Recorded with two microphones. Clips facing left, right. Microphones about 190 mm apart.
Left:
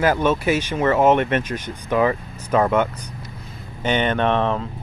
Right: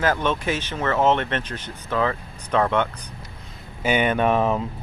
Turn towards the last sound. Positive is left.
turn(degrees=-5)  # may be behind; listen again after turning